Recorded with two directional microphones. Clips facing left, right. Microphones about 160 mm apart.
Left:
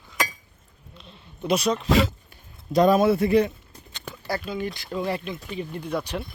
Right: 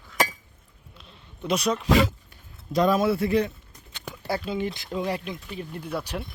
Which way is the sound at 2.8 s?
50° left (ahead or behind).